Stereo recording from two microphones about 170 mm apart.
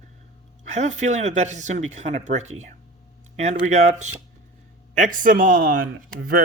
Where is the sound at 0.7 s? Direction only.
45° right (ahead or behind).